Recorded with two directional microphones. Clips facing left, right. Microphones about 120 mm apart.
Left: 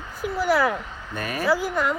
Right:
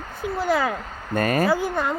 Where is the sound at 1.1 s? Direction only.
50° right (ahead or behind).